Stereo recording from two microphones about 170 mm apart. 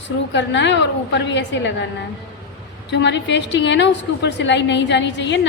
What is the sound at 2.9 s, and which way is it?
A woman's voice, 90° left.